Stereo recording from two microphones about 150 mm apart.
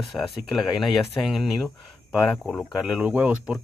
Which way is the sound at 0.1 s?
Centre (ahead or behind).